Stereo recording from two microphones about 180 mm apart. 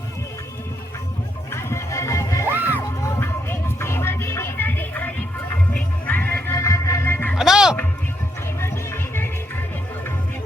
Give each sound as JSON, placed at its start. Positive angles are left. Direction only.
{"t": 1.5, "sound": "music", "side_deg": 15}
{"t": 7.3, "sound": "music", "side_deg": -5}
{"t": 8.6, "sound": "music", "side_deg": 15}